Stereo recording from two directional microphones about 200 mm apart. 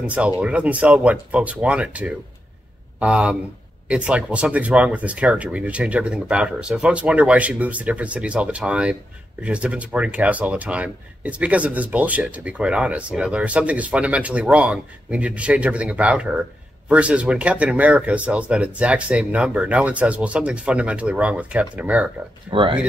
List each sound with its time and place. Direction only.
0.0 s speech: 5° right (ahead or behind)
22.5 s speech: 25° right (ahead or behind)